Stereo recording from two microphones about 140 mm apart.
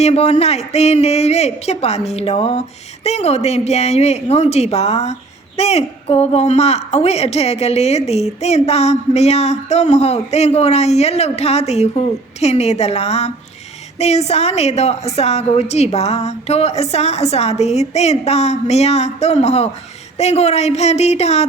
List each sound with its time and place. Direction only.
0.0 s a woman's voice: 50° left (ahead or behind)